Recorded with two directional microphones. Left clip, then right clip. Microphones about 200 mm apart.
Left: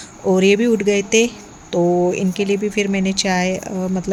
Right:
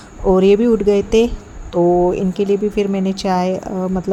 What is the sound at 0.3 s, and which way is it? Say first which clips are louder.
Speech: right 3 dB; 15° right (ahead or behind).